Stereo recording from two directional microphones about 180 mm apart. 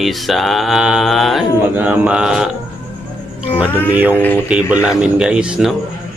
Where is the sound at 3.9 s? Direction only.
10° right (ahead or behind).